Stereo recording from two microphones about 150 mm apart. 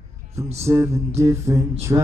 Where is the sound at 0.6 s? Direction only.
20° right (ahead or behind).